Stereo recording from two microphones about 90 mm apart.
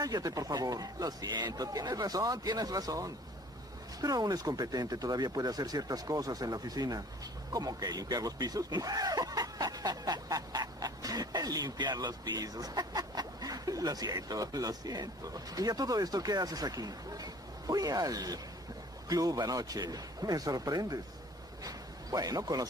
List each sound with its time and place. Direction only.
0.0 s a man's voice: 45° right (ahead or behind)